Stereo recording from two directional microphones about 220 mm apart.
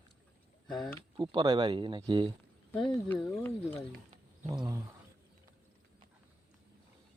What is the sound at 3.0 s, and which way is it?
Speech, 10° left (ahead or behind).